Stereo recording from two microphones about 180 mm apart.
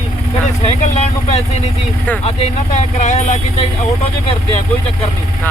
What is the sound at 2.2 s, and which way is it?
Speech, 35° left (ahead or behind).